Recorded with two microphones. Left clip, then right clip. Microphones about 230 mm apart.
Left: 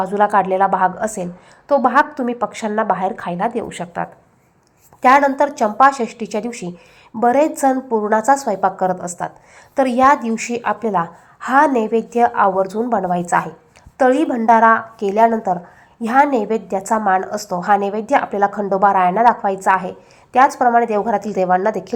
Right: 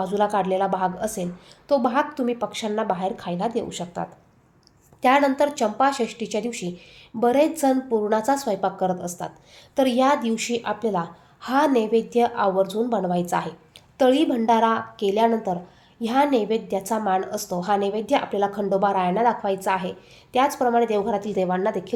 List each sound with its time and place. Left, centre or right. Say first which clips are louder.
0.0 s a woman's voice: left 7 dB; centre
7.4 s a woman's voice: left 5 dB; centre
11.8 s a woman's voice: left 3 dB; centre
12.2 s a woman's voice: left 6 dB; centre